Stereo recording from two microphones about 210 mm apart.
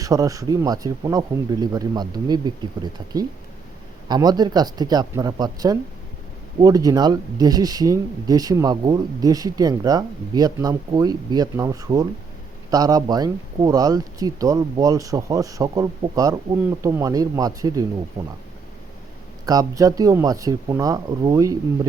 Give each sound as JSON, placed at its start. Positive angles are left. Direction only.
{"t": 0.0, "sound": "speech", "side_deg": -15}
{"t": 18.2, "sound": "speech", "side_deg": -30}
{"t": 19.5, "sound": "speech", "side_deg": -15}